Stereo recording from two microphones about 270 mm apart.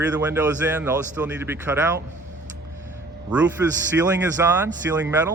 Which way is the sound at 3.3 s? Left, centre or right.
Centre.